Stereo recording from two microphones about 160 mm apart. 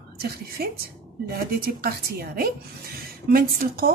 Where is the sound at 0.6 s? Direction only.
70° right (ahead or behind).